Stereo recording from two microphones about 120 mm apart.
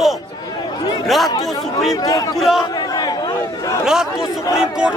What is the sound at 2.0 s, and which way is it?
Speech, 30° left (ahead or behind).